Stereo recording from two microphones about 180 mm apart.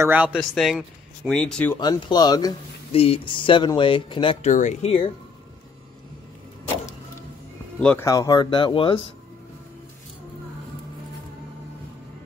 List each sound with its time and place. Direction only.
0.0 s speech: 10° right (ahead or behind)
1.8 s speech: 25° left (ahead or behind)
2.9 s speech: 30° left (ahead or behind)
4.5 s speech: 45° left (ahead or behind)
7.8 s speech: 10° left (ahead or behind); by 9.1 s 30° left (ahead or behind)